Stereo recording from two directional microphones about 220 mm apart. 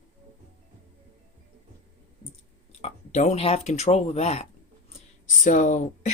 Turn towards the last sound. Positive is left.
turn(degrees=35)  # may be behind; listen again after turning